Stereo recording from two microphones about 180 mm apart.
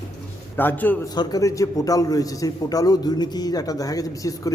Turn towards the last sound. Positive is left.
turn(degrees=20)  # may be behind; listen again after turning